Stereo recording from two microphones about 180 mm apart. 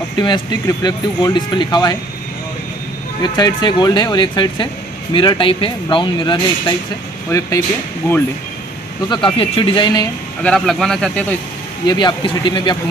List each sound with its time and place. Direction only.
0.2 s speech: 25° left (ahead or behind)
3.2 s speech: 25° left (ahead or behind)
9.1 s speech: 30° left (ahead or behind)
10.4 s speech: 5° left (ahead or behind)
11.8 s speech: 25° left (ahead or behind)